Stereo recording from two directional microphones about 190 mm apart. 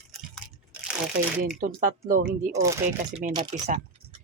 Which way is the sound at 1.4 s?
45° right (ahead or behind).